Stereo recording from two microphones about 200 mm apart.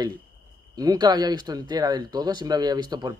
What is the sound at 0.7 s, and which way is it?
Speech, 20° right (ahead or behind).